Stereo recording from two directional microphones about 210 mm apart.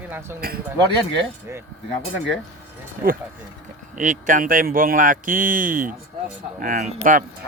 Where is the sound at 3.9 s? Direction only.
40° right (ahead or behind).